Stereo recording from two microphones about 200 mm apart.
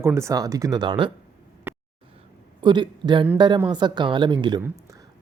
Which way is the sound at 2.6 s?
20° right (ahead or behind).